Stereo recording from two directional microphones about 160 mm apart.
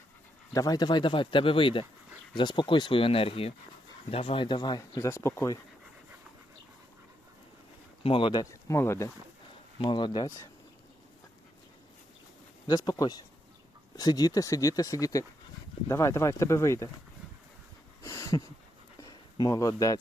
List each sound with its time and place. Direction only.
0.5 s speech: 25° left (ahead or behind)
8.0 s speech: 35° left (ahead or behind); by 9.1 s 15° left (ahead or behind)
9.7 s speech: 30° left (ahead or behind)
12.6 s speech: 25° left (ahead or behind)
18.0 s a sound: 20° left (ahead or behind)
19.0 s speech: 25° left (ahead or behind)